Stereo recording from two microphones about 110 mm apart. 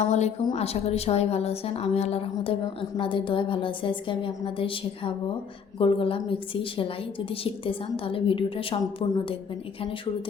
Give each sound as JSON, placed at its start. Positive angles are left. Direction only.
{"t": 0.0, "sound": "a woman's voice", "side_deg": 90}
{"t": 0.5, "sound": "a woman's voice", "side_deg": 70}